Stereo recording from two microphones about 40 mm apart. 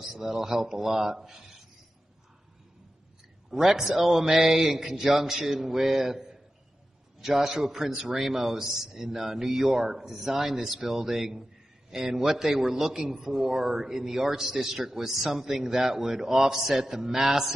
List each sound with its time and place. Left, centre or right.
0.0 s a man's voice: centre
3.4 s a man's voice: centre